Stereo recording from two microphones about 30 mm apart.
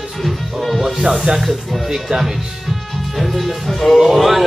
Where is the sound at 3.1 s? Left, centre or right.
Centre.